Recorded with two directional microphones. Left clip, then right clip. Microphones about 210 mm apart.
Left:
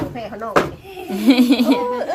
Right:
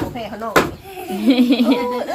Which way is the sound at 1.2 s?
15° left (ahead or behind).